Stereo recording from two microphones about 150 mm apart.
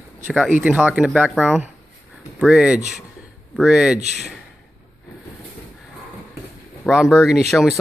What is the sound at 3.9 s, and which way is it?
Speech, 50° right (ahead or behind).